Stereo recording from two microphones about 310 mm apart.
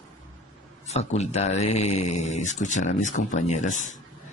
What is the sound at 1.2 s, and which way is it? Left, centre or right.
Speech, left.